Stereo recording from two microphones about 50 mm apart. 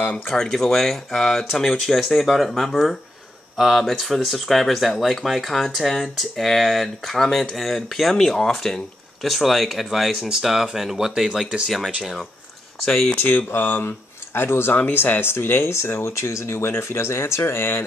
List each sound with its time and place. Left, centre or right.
0.4 s speech: centre
12.8 s speech: centre
13.1 s speech: left
14.7 s speech: left
17.6 s speech: left